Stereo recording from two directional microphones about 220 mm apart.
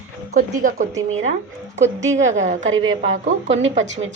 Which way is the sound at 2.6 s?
65° right (ahead or behind).